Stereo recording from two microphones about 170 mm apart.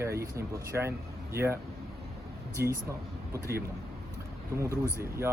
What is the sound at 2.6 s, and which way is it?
Speech, 65° right (ahead or behind).